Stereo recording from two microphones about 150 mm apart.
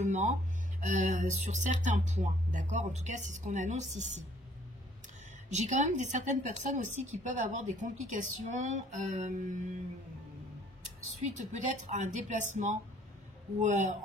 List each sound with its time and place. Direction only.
0.0 s a woman's voice: 50° right (ahead or behind)
5.5 s a woman's voice: 50° right (ahead or behind)
11.3 s a woman's voice: 50° right (ahead or behind)